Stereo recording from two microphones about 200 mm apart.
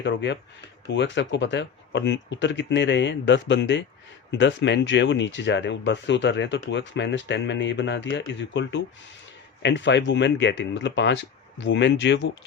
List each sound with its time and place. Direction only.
0.0 s speech: 65° left (ahead or behind)